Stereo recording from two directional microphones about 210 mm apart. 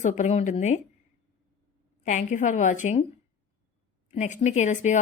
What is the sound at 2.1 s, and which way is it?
Speech, 35° left (ahead or behind).